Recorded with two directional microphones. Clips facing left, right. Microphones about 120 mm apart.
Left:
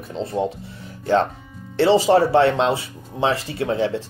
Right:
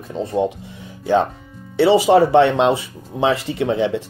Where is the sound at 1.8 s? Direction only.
15° right (ahead or behind).